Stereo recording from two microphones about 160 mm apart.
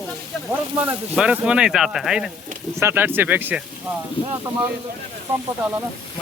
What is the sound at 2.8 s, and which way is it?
Speech, 15° right (ahead or behind).